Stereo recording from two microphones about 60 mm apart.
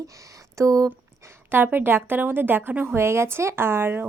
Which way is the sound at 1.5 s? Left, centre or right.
Right.